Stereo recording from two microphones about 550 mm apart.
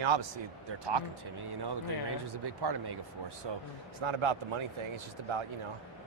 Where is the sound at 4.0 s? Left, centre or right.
Right.